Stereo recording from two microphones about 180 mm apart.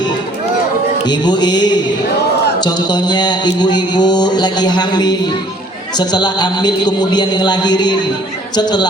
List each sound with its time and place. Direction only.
1.0 s speech: 25° left (ahead or behind)